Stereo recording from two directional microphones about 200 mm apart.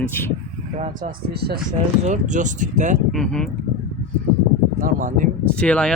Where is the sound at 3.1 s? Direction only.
5° left (ahead or behind).